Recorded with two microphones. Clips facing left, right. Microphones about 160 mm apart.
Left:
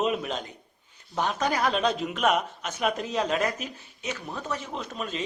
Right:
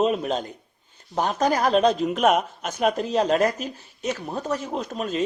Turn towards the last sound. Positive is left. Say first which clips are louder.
# right 7 dB
turn(degrees=-45)  # may be behind; listen again after turning